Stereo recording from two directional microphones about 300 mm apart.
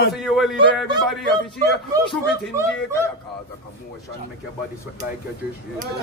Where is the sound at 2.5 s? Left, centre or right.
Centre.